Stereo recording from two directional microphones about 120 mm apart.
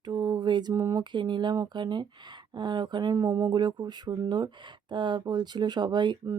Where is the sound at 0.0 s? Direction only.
35° right (ahead or behind).